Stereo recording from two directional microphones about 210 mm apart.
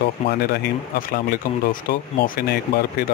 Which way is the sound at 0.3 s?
45° left (ahead or behind).